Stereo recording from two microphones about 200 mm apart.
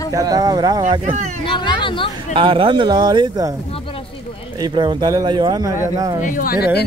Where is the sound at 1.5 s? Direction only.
25° left (ahead or behind).